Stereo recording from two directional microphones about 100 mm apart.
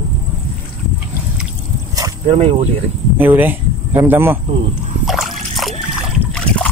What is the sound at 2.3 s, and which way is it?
Speech, 90° right.